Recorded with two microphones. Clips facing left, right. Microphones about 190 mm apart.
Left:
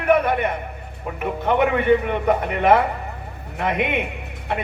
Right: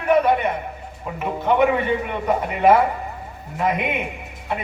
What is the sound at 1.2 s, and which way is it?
A man's voice, 60° left (ahead or behind).